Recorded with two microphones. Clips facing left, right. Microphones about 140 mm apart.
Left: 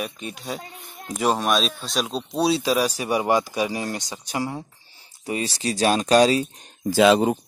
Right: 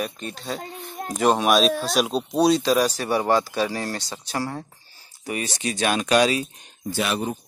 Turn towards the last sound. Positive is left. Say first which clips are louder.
# left 9 dB
turn(degrees=90)